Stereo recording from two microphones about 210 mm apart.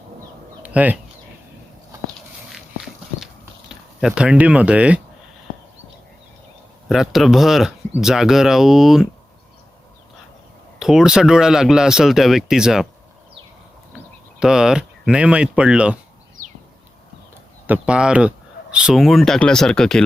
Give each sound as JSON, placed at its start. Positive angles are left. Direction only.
{"t": 0.6, "sound": "a sound", "side_deg": -5}
{"t": 2.5, "sound": "horse", "side_deg": 0}
{"t": 3.7, "sound": "speech", "side_deg": -5}
{"t": 6.8, "sound": "speech", "side_deg": 0}
{"t": 10.8, "sound": "speech", "side_deg": -5}
{"t": 14.3, "sound": "speech", "side_deg": -5}
{"t": 17.7, "sound": "speech", "side_deg": -5}